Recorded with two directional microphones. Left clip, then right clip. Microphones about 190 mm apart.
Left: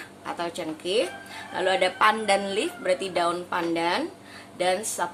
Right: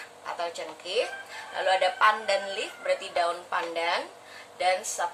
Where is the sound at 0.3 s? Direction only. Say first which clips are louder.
Left 2 dB; 40° left (ahead or behind).